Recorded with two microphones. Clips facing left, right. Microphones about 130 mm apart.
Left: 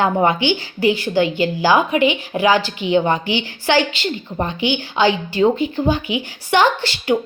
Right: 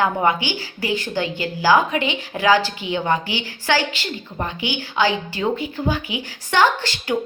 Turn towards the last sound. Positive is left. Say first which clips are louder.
# left 2 dB
turn(degrees=20)  # may be behind; listen again after turning